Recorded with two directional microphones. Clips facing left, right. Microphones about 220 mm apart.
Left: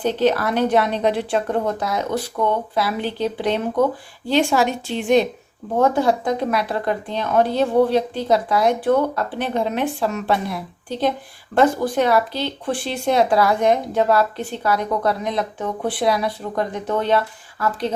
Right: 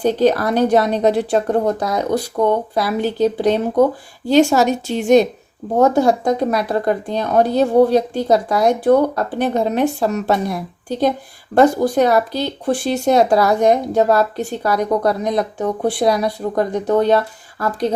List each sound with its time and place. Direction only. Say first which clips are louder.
0.0 s a woman's voice: right 4 dB; 40° right (ahead or behind)